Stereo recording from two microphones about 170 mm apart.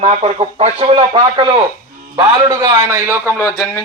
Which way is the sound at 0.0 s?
40° right (ahead or behind).